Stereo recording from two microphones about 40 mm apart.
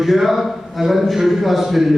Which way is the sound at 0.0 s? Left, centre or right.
Centre.